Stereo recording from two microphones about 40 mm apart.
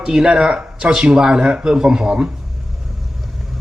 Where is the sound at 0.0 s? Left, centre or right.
Centre.